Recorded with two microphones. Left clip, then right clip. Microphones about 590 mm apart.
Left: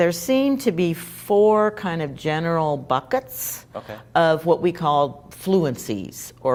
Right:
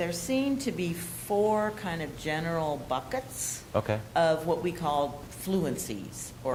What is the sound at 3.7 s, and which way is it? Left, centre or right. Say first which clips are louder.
Speech: right 6 dB; right.